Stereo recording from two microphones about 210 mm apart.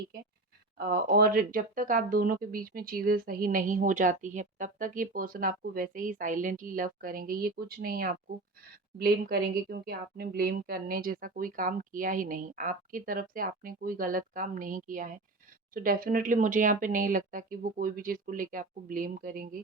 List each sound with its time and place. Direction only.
0.8 s speech: 45° right (ahead or behind)